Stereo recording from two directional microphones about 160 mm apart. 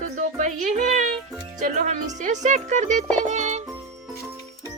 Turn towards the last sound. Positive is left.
turn(degrees=-45)  # may be behind; listen again after turning